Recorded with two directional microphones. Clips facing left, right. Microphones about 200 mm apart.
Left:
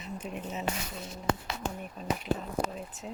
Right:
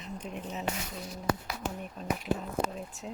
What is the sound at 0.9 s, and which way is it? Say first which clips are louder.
Speech: even; 25° left (ahead or behind).